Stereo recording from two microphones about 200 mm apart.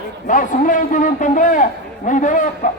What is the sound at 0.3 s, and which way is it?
A man's voice, 40° left (ahead or behind).